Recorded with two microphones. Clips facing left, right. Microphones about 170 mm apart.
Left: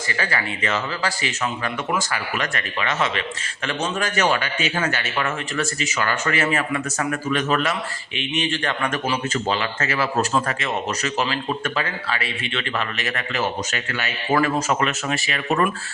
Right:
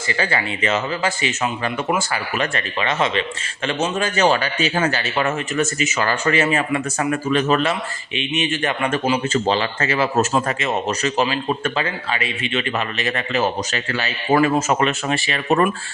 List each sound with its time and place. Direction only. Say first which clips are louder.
0.1 s speech: right 4 dB; 25° right (ahead or behind)